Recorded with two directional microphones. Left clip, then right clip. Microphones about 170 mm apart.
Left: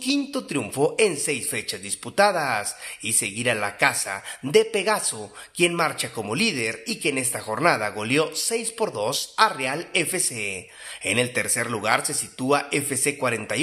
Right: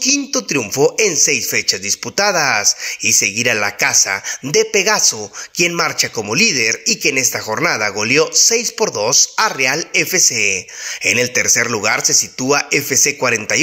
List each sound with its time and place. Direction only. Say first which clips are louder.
0.3 s a man's voice: right 10 dB; 20° right (ahead or behind)